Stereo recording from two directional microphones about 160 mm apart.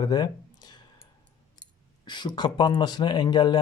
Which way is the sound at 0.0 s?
25° left (ahead or behind).